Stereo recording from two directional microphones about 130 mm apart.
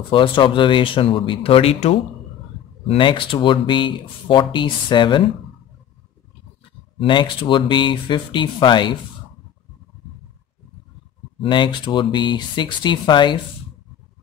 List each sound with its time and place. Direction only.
0.1 s speech: 40° left (ahead or behind)
2.9 s speech: 40° left (ahead or behind)
7.0 s speech: 40° left (ahead or behind)
11.4 s speech: 40° left (ahead or behind)